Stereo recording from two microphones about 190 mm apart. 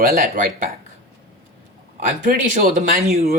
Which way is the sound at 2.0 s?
45° right (ahead or behind).